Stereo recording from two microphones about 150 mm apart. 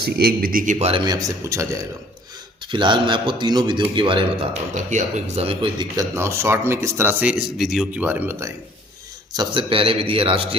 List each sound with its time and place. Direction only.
0.0 s speech: 90° right; by 0.9 s 60° right (ahead or behind)
0.9 s speech: 30° right (ahead or behind)
2.7 s a man's voice: 30° right (ahead or behind)
4.7 s a man's voice: 55° right (ahead or behind); by 6.1 s 30° right (ahead or behind)
6.1 s speech: 15° right (ahead or behind)
9.3 s a man's voice: 30° right (ahead or behind)